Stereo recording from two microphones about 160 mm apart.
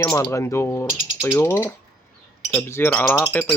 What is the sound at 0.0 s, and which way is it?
Speech, 20° left (ahead or behind).